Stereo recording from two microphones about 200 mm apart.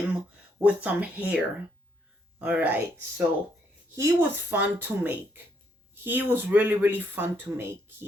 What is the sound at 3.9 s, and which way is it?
Speech, 10° right (ahead or behind).